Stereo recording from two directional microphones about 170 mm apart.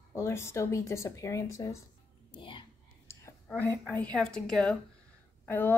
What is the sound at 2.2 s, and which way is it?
Music, 30° left (ahead or behind).